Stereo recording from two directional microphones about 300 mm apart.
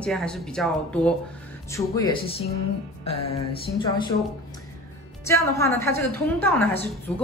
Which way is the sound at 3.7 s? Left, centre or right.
Centre.